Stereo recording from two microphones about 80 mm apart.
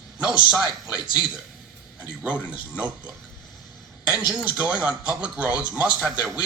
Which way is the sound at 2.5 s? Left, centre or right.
Centre.